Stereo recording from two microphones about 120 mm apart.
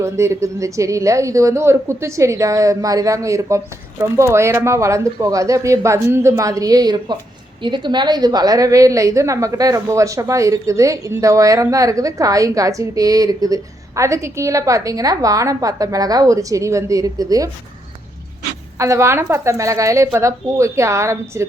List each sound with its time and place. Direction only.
0.0 s a woman's voice: 25° right (ahead or behind)
18.8 s a woman's voice: 25° right (ahead or behind)